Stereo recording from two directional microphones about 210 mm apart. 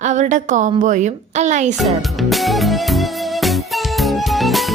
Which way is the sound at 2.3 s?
Centre (ahead or behind).